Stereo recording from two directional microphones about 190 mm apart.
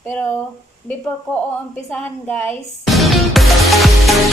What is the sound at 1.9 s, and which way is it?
Music, 10° left (ahead or behind).